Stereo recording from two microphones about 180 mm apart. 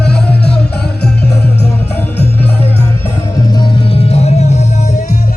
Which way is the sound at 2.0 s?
10° left (ahead or behind).